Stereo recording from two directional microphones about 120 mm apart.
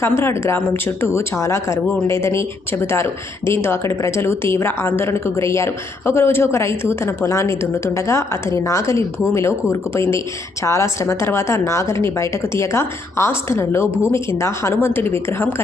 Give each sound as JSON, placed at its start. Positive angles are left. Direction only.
{"t": 0.0, "sound": "speech", "side_deg": 20}